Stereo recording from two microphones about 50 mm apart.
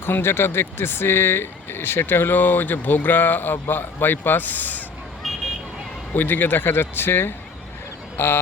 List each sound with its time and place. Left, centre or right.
0.0 s speech: left
6.1 s speech: left